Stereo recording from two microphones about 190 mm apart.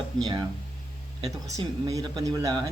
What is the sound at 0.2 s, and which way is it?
Speech, 20° right (ahead or behind).